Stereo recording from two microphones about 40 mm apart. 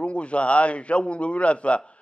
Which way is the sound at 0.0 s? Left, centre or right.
Left.